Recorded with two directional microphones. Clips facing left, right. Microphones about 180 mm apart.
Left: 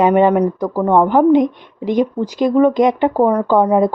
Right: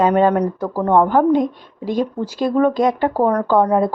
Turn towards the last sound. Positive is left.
turn(degrees=15)  # may be behind; listen again after turning